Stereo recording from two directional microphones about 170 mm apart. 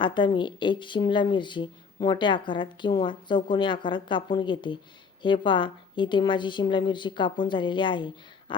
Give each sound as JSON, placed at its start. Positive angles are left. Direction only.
{"t": 0.0, "sound": "speech", "side_deg": 30}